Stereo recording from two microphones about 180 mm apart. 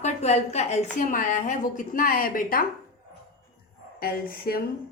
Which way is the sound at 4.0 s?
55° left (ahead or behind).